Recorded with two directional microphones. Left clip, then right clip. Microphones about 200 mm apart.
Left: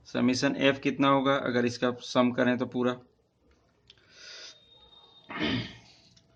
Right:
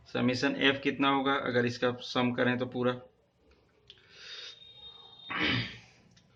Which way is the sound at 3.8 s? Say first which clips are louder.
Right 1 dB; 55° left (ahead or behind).